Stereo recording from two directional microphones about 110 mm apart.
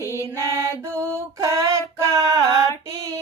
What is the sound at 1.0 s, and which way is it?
Female singing, 25° right (ahead or behind).